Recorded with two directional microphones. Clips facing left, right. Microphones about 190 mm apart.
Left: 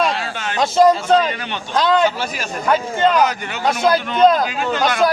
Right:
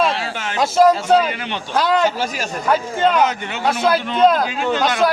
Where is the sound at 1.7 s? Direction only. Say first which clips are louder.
Left 1 dB; 10° right (ahead or behind).